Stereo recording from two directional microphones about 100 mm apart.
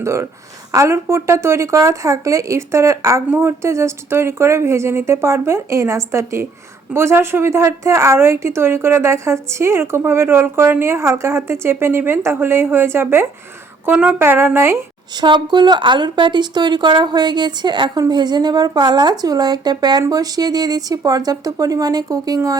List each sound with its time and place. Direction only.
0.0 s a woman's voice: 30° right (ahead or behind)
15.1 s a woman's voice: 50° right (ahead or behind)